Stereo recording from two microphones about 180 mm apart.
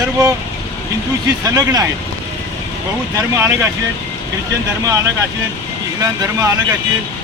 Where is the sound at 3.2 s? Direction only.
15° right (ahead or behind).